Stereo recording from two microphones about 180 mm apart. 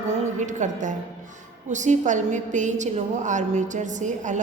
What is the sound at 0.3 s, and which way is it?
A woman's voice, 45° right (ahead or behind).